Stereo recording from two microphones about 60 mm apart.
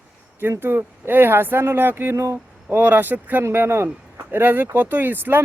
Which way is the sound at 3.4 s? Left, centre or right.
Right.